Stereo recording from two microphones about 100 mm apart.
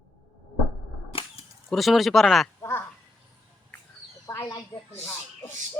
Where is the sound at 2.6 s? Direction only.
25° left (ahead or behind).